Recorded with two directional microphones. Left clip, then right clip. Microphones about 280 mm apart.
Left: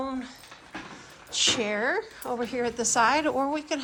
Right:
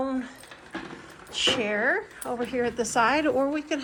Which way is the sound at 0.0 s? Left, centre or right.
Centre.